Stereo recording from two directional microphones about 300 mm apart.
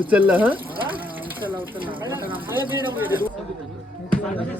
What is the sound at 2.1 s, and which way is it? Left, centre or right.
Speech, centre.